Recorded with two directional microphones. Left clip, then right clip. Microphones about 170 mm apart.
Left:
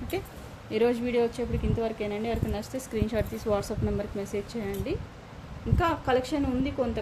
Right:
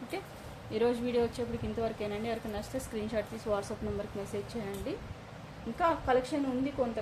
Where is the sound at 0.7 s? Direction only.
40° left (ahead or behind).